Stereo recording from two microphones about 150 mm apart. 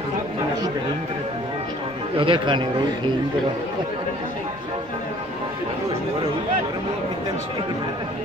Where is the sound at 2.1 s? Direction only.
35° right (ahead or behind).